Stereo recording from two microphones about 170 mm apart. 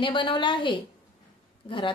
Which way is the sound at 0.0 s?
30° left (ahead or behind).